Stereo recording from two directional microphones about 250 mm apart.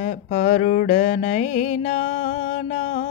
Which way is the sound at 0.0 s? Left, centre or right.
Left.